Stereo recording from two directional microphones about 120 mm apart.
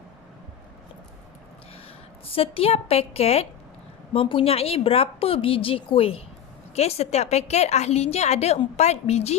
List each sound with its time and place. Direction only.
2.2 s a woman's voice: 50° left (ahead or behind)